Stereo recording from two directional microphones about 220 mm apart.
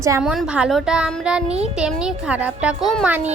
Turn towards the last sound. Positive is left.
turn(degrees=-5)  # may be behind; listen again after turning